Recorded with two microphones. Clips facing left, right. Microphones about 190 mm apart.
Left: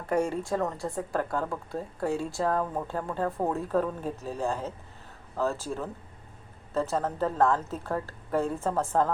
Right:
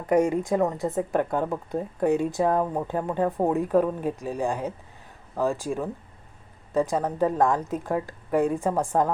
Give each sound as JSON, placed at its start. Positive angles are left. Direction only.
{"t": 0.0, "sound": "speech", "side_deg": -15}